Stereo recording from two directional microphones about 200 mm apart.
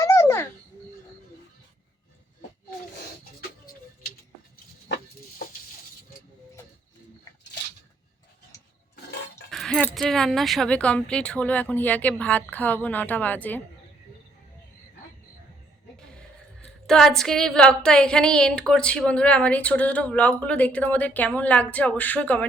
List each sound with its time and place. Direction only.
0.0 s a sound: 15° left (ahead or behind)
9.5 s a woman's voice: centre (ahead or behind)
16.8 s a woman's voice: centre (ahead or behind)